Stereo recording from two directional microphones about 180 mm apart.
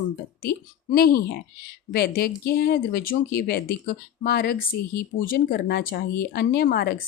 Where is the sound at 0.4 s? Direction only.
55° left (ahead or behind).